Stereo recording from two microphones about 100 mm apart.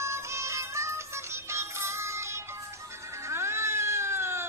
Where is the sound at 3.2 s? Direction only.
25° right (ahead or behind).